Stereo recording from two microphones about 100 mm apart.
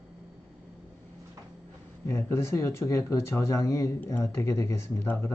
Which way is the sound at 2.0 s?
30° left (ahead or behind).